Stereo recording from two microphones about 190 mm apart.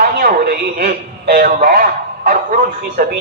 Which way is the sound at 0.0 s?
55° right (ahead or behind).